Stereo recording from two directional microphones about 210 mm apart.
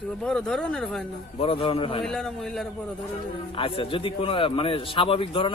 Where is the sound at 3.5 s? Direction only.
25° left (ahead or behind).